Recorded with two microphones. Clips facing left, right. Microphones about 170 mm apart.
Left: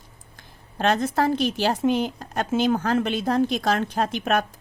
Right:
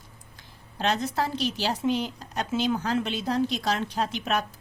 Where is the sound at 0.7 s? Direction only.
50° left (ahead or behind).